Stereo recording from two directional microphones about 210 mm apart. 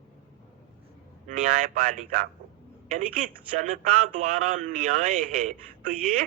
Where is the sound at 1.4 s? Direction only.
40° right (ahead or behind).